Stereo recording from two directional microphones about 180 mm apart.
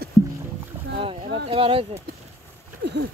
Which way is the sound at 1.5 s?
30° right (ahead or behind).